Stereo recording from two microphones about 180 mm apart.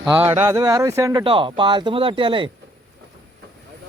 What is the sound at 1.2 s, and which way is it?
Speech, 30° right (ahead or behind).